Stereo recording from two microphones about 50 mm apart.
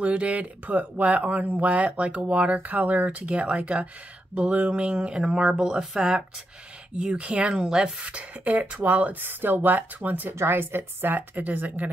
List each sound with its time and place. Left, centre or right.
0.0 s speech: right; by 6.2 s centre
7.0 s speech: right
9.2 s speech: right
10.5 s a woman's voice: right